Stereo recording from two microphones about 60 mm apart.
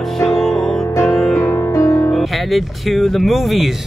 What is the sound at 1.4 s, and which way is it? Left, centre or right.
Music, left.